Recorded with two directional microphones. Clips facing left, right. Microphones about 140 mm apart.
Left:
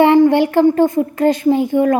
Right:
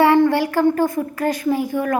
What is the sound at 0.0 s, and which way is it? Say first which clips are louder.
Speech: left 4 dB; 20° left (ahead or behind).